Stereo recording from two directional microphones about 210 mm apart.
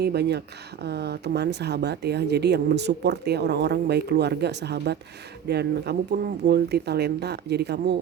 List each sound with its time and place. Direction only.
0.0 s speech: 50° right (ahead or behind)